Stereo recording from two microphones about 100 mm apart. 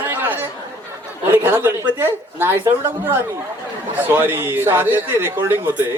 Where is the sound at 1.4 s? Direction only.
20° right (ahead or behind).